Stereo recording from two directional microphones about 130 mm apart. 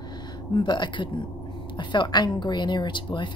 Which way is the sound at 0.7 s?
35° left (ahead or behind).